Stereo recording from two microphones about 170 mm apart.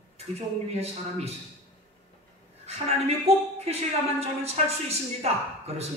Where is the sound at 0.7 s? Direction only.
40° right (ahead or behind).